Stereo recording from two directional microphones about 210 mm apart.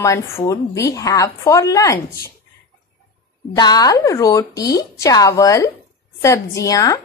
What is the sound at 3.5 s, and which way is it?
A woman's voice, 20° left (ahead or behind).